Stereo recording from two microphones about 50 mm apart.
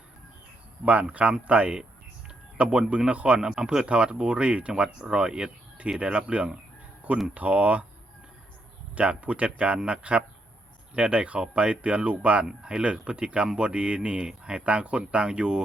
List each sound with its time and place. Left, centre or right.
1.1 s speech: right
9.0 s speech: right